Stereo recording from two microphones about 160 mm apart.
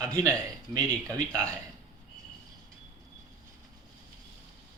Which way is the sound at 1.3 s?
10° left (ahead or behind).